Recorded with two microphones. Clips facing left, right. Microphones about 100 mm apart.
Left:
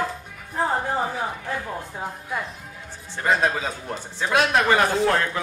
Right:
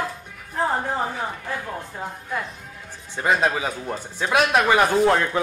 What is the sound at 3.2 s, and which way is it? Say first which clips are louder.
A man's voice: right 1 dB; 15° right (ahead or behind).